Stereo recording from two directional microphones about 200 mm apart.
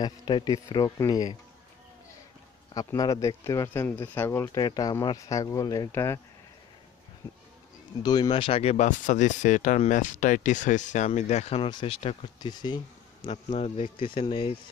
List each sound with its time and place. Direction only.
0.0 s speech: 20° left (ahead or behind)
2.7 s speech: 20° left (ahead or behind)
8.0 s speech: 20° left (ahead or behind)